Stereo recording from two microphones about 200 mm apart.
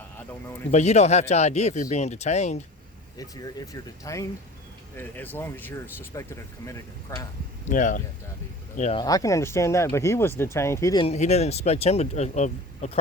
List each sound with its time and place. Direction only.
0.7 s speech: 35° left (ahead or behind)
3.2 s speech: 20° left (ahead or behind)
7.7 s speech: 40° left (ahead or behind)
9.0 s speech: 15° left (ahead or behind)
11.0 s speech: 35° left (ahead or behind)